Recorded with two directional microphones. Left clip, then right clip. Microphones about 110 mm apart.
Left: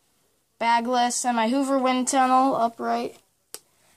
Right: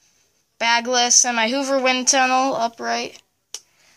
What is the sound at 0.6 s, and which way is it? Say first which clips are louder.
Speech: right 3 dB; centre (ahead or behind).